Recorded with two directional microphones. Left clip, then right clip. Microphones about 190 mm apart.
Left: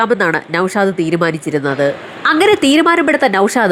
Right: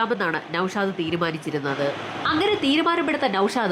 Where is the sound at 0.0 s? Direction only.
30° left (ahead or behind).